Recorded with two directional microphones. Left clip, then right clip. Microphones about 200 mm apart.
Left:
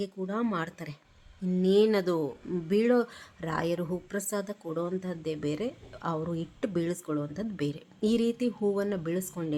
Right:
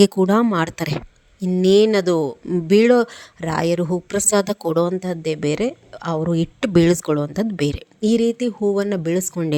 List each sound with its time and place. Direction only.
0.0 s speech: 55° right (ahead or behind)
0.4 s speech: 45° right (ahead or behind)